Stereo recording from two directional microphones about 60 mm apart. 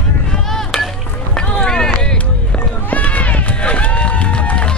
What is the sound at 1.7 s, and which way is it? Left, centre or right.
Run, centre.